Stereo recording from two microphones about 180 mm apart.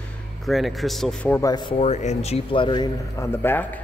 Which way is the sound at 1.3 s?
20° left (ahead or behind).